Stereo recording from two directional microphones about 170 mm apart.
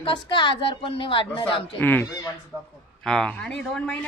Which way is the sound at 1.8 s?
10° left (ahead or behind).